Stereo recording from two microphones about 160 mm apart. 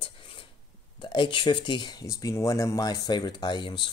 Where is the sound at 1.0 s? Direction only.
30° left (ahead or behind).